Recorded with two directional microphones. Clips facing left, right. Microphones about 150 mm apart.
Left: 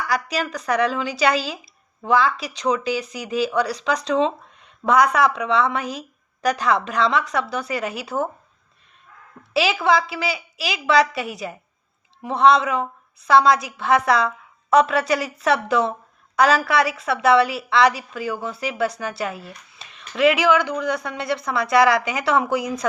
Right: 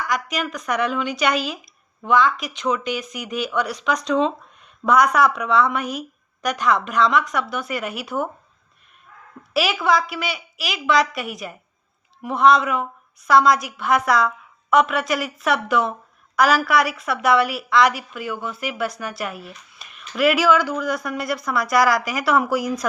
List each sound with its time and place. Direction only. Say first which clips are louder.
0.1 s a woman's voice: left 3 dB; 35° left (ahead or behind)
9.5 s a woman's voice: left 1 dB; 25° left (ahead or behind)